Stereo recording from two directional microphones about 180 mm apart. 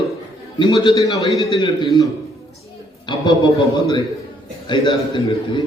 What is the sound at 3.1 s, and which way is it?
Speech, 25° left (ahead or behind).